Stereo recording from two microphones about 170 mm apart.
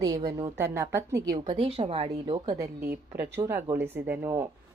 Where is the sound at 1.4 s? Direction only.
35° right (ahead or behind).